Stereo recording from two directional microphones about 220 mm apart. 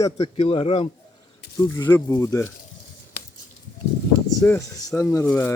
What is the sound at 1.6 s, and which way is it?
Speech, 15° left (ahead or behind).